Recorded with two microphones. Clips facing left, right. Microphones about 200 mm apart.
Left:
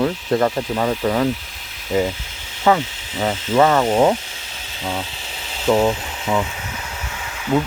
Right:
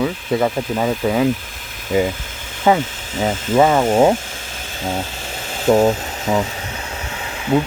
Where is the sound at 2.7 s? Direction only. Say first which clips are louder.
Right 3 dB; 45° right (ahead or behind).